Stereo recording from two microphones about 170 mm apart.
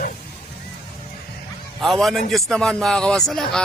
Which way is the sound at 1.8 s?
Centre (ahead or behind).